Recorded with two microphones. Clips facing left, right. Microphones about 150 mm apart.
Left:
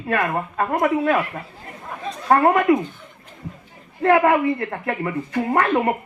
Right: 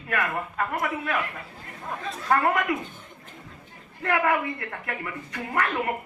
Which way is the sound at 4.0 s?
30° left (ahead or behind).